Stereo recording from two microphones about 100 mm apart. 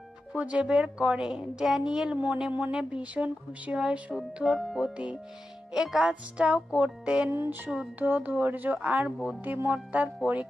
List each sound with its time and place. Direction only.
0.3 s a woman's voice: 10° right (ahead or behind)
7.3 s a woman's voice: 25° right (ahead or behind)